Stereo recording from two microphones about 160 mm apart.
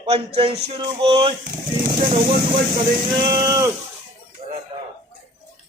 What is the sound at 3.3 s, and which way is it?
Speech, 20° right (ahead or behind).